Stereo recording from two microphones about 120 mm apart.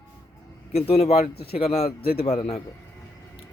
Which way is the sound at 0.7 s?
60° left (ahead or behind).